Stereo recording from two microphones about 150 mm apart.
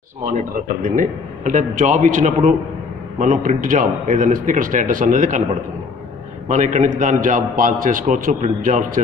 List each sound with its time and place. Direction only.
0.8 s a man's voice: 60° right (ahead or behind)
6.5 s a man's voice: 55° right (ahead or behind)